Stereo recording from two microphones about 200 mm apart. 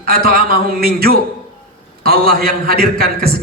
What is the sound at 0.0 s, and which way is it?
A man's voice, 45° right (ahead or behind).